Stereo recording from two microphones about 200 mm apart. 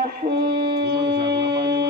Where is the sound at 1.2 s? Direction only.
25° right (ahead or behind).